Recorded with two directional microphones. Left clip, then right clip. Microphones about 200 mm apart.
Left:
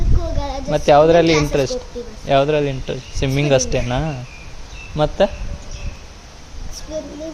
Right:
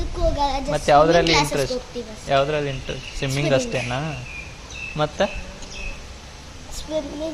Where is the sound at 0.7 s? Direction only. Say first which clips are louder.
Left 5 dB; 55° left (ahead or behind).